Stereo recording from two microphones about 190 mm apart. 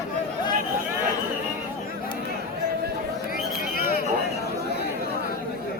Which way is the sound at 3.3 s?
50° left (ahead or behind).